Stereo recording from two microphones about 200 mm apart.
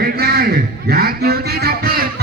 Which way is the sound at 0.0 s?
50° right (ahead or behind).